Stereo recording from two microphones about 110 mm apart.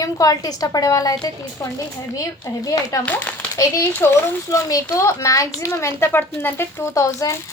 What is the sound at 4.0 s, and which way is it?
A woman's voice, 25° left (ahead or behind).